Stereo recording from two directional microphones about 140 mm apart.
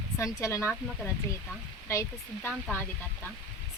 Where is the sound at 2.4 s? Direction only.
15° left (ahead or behind).